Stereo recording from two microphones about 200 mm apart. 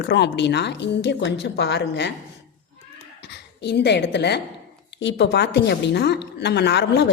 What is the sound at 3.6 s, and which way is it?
A woman's voice, 55° left (ahead or behind).